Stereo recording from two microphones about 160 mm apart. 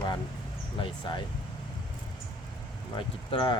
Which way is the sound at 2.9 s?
30° left (ahead or behind).